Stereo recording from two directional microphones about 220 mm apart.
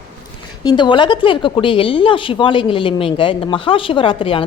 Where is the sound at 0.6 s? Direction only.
20° left (ahead or behind).